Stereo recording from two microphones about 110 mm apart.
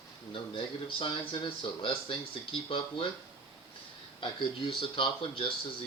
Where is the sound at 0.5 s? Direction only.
50° left (ahead or behind).